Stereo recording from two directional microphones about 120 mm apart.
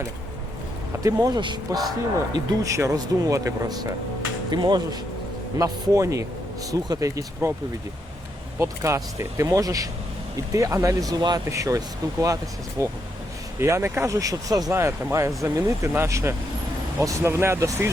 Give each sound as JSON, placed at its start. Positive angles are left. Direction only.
{"t": 1.0, "sound": "speech", "side_deg": -35}
{"t": 8.5, "sound": "speech", "side_deg": -25}
{"t": 12.8, "sound": "speech", "side_deg": -30}